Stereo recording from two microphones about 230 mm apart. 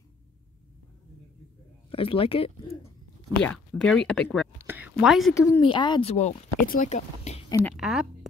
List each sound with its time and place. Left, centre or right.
1.9 s speech: left
3.4 s speech: centre
4.6 s whispering: centre
5.3 s speech: centre; by 7.4 s left
7.4 s a woman's voice: centre
7.7 s a sound: centre